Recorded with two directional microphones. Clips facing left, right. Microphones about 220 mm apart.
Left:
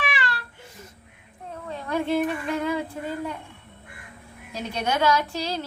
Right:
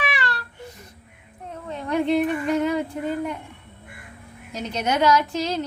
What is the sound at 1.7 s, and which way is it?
Speech, 20° right (ahead or behind).